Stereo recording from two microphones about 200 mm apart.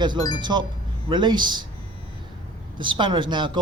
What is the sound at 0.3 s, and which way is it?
Speech, 20° right (ahead or behind).